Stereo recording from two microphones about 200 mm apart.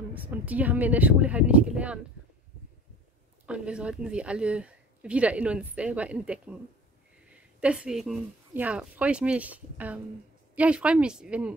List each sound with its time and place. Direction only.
0.1 s speech: 10° right (ahead or behind)
3.4 s a woman's voice: 5° right (ahead or behind)